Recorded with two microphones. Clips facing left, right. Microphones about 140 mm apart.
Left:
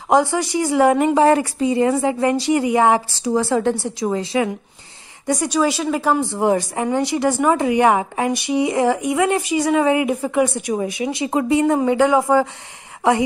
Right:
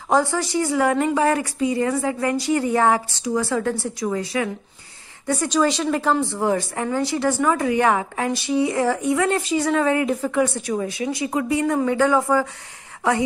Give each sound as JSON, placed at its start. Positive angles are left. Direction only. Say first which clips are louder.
{"t": 0.1, "sound": "speech", "louder": "left 3 dB", "side_deg": 20}
{"t": 3.2, "sound": "speech", "louder": "left 4 dB", "side_deg": 30}